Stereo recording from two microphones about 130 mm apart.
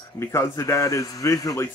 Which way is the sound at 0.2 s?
20° left (ahead or behind).